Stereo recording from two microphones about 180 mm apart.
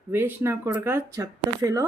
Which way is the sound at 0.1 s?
10° right (ahead or behind).